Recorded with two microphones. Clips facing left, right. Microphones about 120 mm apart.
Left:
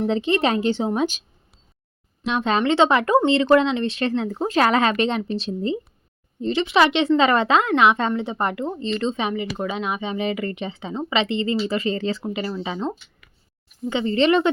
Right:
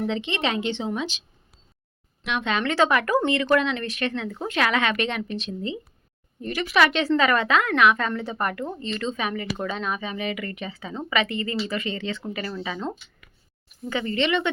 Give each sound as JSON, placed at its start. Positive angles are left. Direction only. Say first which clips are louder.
{"t": 0.0, "sound": "speech", "louder": "left 6 dB", "side_deg": 35}
{"t": 2.2, "sound": "speech", "louder": "left 5 dB", "side_deg": 35}
{"t": 2.6, "sound": "speech", "louder": "left 3 dB", "side_deg": 25}
{"t": 6.4, "sound": "speech", "louder": "left 4 dB", "side_deg": 25}
{"t": 9.3, "sound": "speech", "louder": "left 3 dB", "side_deg": 15}
{"t": 12.2, "sound": "speech", "louder": "left 4 dB", "side_deg": 20}
{"t": 13.9, "sound": "speech", "louder": "left 6 dB", "side_deg": 30}